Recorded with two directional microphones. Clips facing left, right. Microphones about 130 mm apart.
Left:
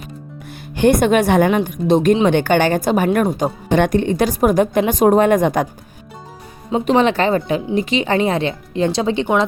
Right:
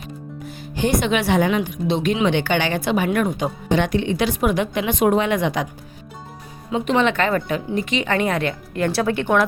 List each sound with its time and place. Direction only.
0.8 s a woman's voice: 55° left (ahead or behind)
6.7 s speech: 35° left (ahead or behind); by 9.5 s 20° left (ahead or behind)